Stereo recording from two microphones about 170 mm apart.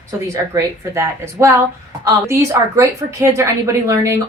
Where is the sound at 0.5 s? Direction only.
15° right (ahead or behind).